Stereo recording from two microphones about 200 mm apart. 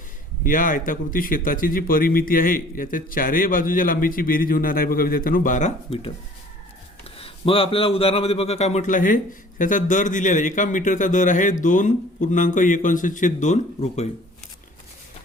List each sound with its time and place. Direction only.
0.4 s speech: 40° left (ahead or behind)
7.2 s a man's voice: 25° left (ahead or behind)